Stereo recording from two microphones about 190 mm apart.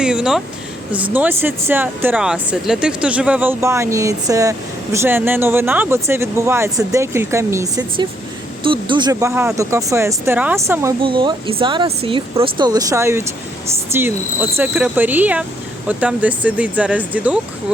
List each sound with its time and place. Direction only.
0.0 s speech: 5° right (ahead or behind)
11.0 s speech: 25° right (ahead or behind)
14.8 s speech: 10° right (ahead or behind)